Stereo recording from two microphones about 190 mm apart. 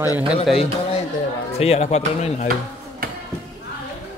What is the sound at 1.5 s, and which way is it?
Speech, 35° left (ahead or behind).